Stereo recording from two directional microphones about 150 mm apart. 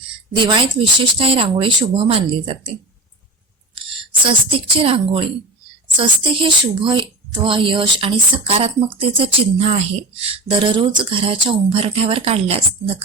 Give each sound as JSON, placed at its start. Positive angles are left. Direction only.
{"t": 0.3, "sound": "speech", "side_deg": -35}
{"t": 3.8, "sound": "speech", "side_deg": -35}